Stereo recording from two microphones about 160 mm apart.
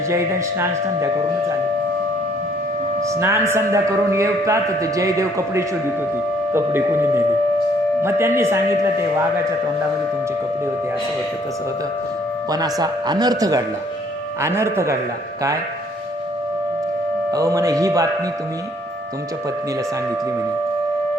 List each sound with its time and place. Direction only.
0.1 s a man's voice: 20° right (ahead or behind)
3.2 s a man's voice: 15° right (ahead or behind)
12.5 s a man's voice: 25° right (ahead or behind)
17.3 s a man's voice: 20° right (ahead or behind)